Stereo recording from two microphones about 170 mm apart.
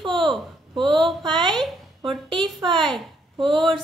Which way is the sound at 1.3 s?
25° right (ahead or behind).